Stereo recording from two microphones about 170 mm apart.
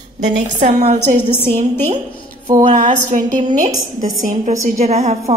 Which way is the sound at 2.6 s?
45° right (ahead or behind).